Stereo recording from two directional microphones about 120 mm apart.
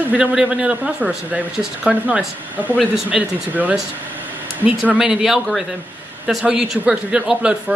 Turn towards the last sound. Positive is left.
turn(degrees=-10)  # may be behind; listen again after turning